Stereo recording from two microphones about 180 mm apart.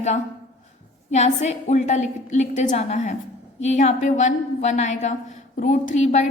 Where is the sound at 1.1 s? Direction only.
40° left (ahead or behind).